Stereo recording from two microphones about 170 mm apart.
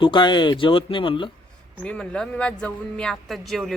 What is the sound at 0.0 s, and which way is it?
Speech, 30° left (ahead or behind).